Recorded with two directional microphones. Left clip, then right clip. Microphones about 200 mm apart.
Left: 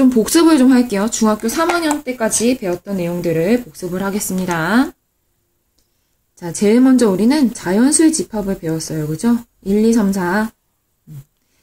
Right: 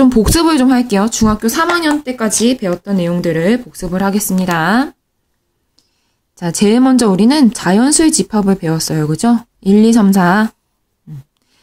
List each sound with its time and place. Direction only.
0.0 s a woman's voice: 40° right (ahead or behind)
5.8 s clicking: 40° right (ahead or behind)
6.3 s a woman's voice: 40° right (ahead or behind)